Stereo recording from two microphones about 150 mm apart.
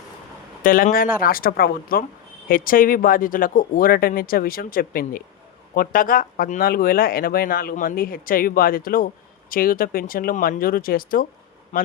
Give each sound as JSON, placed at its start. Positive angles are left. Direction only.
{"t": 0.6, "sound": "speech", "side_deg": 70}
{"t": 2.5, "sound": "speech", "side_deg": 70}
{"t": 11.7, "sound": "speech", "side_deg": 55}